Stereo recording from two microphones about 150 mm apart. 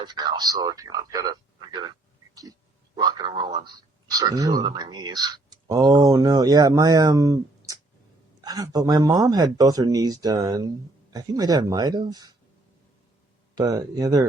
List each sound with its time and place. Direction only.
0.0 s a man's voice: 30° right (ahead or behind)
13.6 s speech: 25° right (ahead or behind)